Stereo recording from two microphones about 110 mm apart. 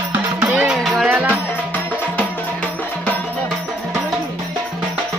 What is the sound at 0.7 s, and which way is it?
Music, centre (ahead or behind).